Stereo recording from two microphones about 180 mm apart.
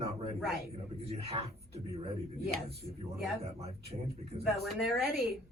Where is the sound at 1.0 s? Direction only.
35° right (ahead or behind).